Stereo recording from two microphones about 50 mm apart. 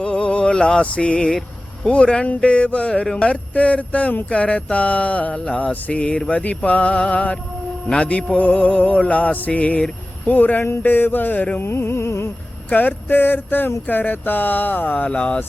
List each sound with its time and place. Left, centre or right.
0.0 s music: left
1.9 s speech: left
8.4 s speech: left
11.5 s a sound: left
12.7 s speech: left